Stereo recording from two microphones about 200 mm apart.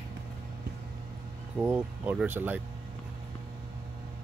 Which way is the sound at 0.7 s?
55° right (ahead or behind).